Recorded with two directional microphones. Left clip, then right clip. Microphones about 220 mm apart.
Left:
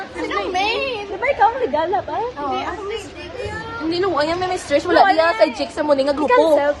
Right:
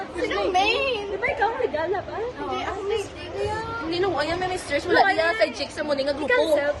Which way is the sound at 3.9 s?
15° left (ahead or behind).